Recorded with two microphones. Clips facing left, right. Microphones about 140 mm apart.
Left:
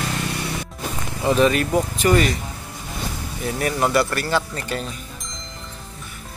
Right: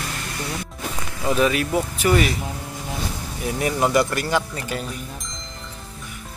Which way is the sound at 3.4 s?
15° right (ahead or behind).